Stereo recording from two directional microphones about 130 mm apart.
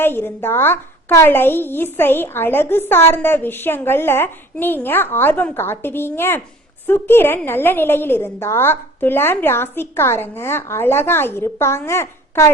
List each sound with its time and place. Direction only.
0.0 s a woman's voice: 15° left (ahead or behind)